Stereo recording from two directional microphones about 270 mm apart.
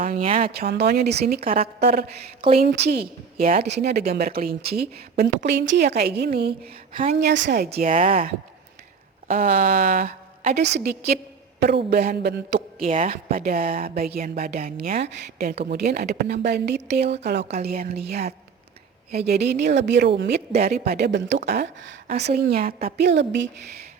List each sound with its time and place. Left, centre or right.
0.0 s speech: right
0.5 s speech: right
1.4 s speech: right
1.6 s speech: right
2.4 s a woman's voice: right
2.7 s speech: right
7.7 s speech: right
20.5 s speech: right
20.7 s speech: right